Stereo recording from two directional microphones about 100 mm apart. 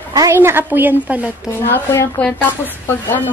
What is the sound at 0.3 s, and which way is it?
A woman's voice, 20° right (ahead or behind).